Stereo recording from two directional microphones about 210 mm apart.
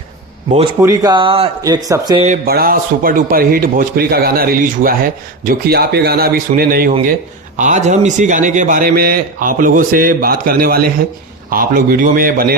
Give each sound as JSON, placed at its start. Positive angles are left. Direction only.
{"t": 0.8, "sound": "speech", "side_deg": -15}
{"t": 2.2, "sound": "a man's voice", "side_deg": -40}